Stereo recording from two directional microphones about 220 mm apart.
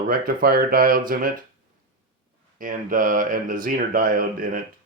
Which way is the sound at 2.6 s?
40° right (ahead or behind).